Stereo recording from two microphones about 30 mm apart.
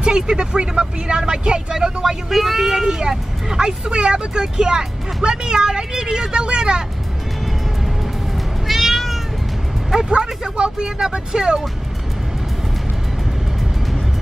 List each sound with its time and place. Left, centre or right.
0.0 s speech: right
2.2 s speech: centre; by 6.8 s right
8.6 s cat: centre
9.8 s speech: centre
10.1 s speech: right